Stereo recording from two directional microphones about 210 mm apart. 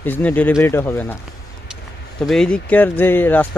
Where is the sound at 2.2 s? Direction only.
5° left (ahead or behind).